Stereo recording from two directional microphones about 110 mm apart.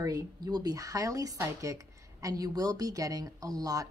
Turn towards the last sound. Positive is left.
turn(degrees=-35)  # may be behind; listen again after turning